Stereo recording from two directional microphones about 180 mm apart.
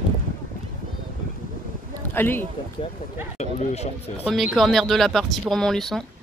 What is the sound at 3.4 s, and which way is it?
Speech, 40° left (ahead or behind).